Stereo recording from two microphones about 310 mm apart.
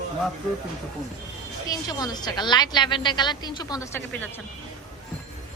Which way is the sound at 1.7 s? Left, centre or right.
Centre.